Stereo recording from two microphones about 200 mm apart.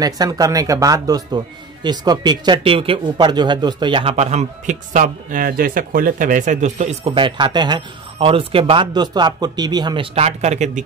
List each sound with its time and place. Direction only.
0.0 s speech: 20° right (ahead or behind); by 10.8 s 35° right (ahead or behind)